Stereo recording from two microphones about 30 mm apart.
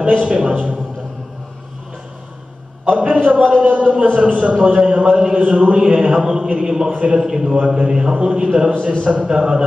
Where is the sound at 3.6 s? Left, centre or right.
Right.